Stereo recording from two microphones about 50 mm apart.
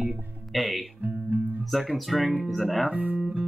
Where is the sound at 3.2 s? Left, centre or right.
Right.